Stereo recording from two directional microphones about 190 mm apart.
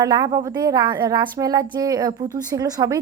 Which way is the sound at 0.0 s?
20° right (ahead or behind).